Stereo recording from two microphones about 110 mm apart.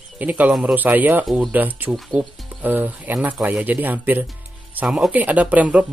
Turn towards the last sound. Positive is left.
turn(degrees=-15)  # may be behind; listen again after turning